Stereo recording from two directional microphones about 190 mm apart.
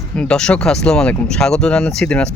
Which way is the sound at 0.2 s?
5° left (ahead or behind).